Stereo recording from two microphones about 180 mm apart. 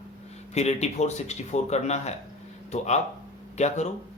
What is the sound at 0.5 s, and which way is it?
Speech, 35° left (ahead or behind).